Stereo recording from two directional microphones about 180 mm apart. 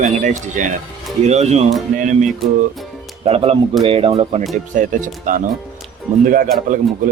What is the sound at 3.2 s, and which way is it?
Speech, 35° right (ahead or behind).